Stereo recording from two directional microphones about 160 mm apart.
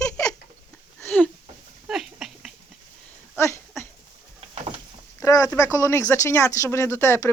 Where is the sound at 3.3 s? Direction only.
15° left (ahead or behind).